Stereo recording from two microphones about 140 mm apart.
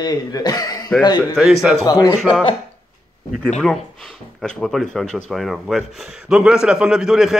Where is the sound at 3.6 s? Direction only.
5° left (ahead or behind).